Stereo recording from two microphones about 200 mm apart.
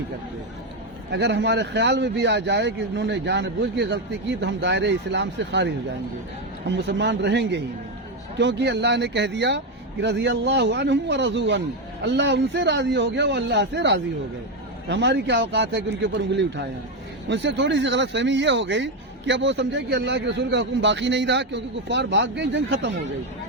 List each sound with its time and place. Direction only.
1.1 s speech: 60° right (ahead or behind)